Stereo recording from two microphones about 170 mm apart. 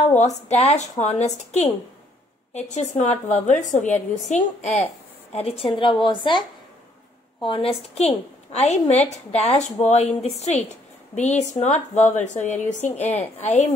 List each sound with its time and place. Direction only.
0.0 s a woman's voice: 45° left (ahead or behind)
7.4 s a woman's voice: 30° left (ahead or behind)
13.0 s a woman's voice: 10° left (ahead or behind)
13.4 s a woman's voice: 40° left (ahead or behind)